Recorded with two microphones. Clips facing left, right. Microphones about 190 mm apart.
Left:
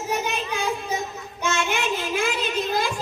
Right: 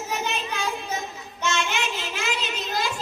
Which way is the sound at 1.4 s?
55° left (ahead or behind).